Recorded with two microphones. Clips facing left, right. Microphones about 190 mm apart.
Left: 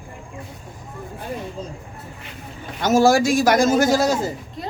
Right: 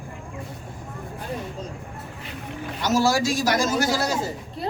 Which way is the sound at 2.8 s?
50° left (ahead or behind).